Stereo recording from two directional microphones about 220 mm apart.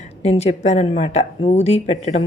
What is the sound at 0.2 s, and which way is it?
Speech, 30° left (ahead or behind).